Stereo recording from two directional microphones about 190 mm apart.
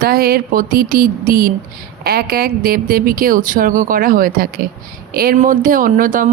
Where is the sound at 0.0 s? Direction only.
50° right (ahead or behind).